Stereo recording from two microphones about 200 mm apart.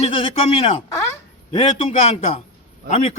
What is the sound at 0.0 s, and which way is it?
A man's voice, 30° left (ahead or behind).